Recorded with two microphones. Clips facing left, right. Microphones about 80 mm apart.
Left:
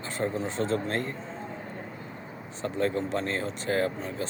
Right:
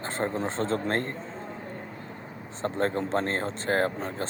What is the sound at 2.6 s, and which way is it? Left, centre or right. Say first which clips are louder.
Speech: right 1 dB; right.